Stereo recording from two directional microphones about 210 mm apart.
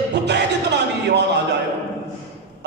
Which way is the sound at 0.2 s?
55° right (ahead or behind).